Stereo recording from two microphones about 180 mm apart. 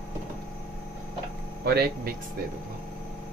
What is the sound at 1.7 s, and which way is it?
Speech, 60° right (ahead or behind).